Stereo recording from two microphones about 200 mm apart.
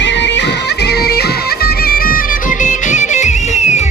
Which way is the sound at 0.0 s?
60° left (ahead or behind).